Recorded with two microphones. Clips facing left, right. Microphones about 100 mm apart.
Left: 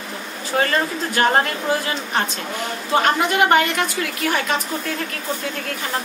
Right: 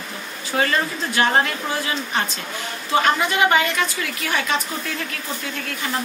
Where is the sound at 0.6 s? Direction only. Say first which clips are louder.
Left 1 dB; 45° left (ahead or behind).